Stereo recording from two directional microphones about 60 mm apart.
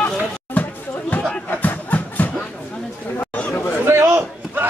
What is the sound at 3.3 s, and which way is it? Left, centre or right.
Chatter, left.